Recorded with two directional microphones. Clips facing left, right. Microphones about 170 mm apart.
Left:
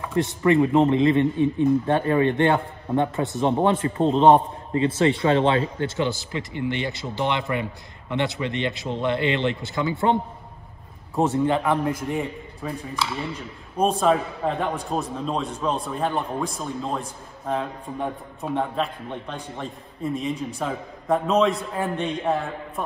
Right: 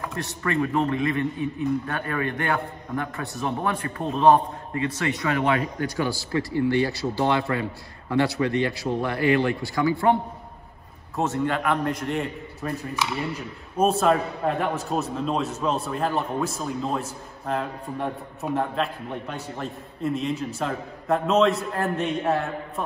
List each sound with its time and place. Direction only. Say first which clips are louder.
0.4 s speech: left 6 dB; 20° left (ahead or behind)
11.1 s a man's voice: left 4 dB; 15° left (ahead or behind)
12.9 s a man's voice: even; 10° right (ahead or behind)